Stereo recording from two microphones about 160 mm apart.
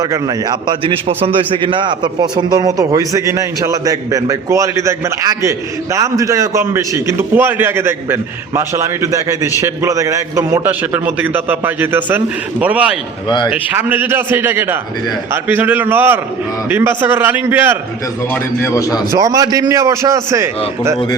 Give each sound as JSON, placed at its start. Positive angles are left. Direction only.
{"t": 0.0, "sound": "a man's voice", "side_deg": -25}
{"t": 13.2, "sound": "a man's voice", "side_deg": 30}
{"t": 13.5, "sound": "a man's voice", "side_deg": -10}
{"t": 18.6, "sound": "a man's voice", "side_deg": 20}
{"t": 19.1, "sound": "a man's voice", "side_deg": -20}